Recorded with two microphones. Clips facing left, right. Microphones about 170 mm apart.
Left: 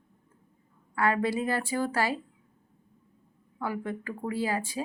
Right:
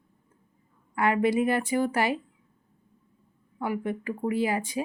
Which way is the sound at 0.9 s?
20° right (ahead or behind).